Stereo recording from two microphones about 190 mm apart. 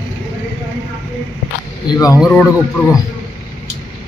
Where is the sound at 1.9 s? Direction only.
20° left (ahead or behind).